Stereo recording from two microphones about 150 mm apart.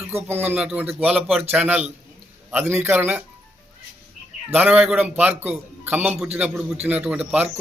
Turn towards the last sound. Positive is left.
turn(degrees=-5)  # may be behind; listen again after turning